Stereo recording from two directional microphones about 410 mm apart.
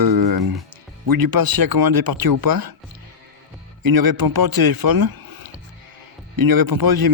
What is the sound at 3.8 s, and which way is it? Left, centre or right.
A man's voice, right.